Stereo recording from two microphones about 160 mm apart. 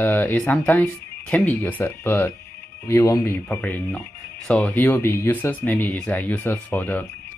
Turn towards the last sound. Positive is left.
turn(degrees=10)  # may be behind; listen again after turning